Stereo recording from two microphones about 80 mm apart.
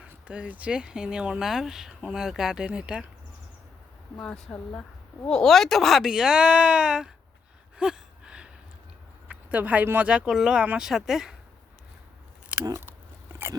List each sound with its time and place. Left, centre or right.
0.3 s speech: centre
4.5 s speech: centre
7.8 s gasp: centre
9.2 s speech: centre
10.1 s speech: centre